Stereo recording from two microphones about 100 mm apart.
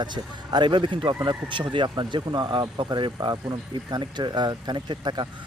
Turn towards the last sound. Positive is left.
turn(degrees=-50)  # may be behind; listen again after turning